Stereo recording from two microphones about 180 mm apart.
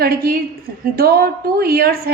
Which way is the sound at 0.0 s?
55° right (ahead or behind).